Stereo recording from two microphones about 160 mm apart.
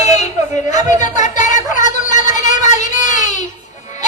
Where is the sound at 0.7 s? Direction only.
25° right (ahead or behind).